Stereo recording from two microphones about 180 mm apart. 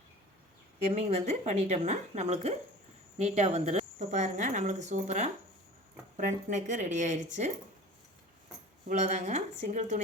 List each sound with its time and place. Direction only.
0.9 s speech: 40° right (ahead or behind)
8.9 s speech: 40° right (ahead or behind)